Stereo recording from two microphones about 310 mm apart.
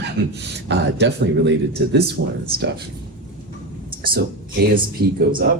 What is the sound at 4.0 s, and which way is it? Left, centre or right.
Speech, right.